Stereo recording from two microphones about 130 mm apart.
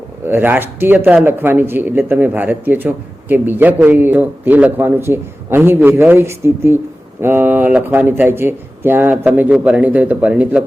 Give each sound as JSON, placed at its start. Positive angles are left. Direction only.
{"t": 0.3, "sound": "a man's voice", "side_deg": -15}